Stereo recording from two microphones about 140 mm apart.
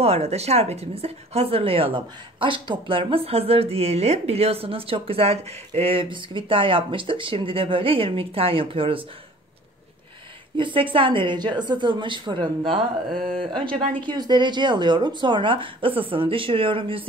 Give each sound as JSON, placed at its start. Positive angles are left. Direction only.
{"t": 0.0, "sound": "a woman's voice", "side_deg": -50}
{"t": 10.6, "sound": "speech", "side_deg": -40}